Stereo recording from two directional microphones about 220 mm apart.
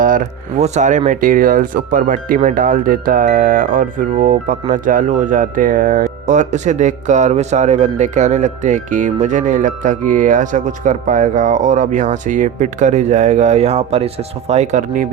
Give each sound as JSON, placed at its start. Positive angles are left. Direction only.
{"t": 0.0, "sound": "speech", "side_deg": -35}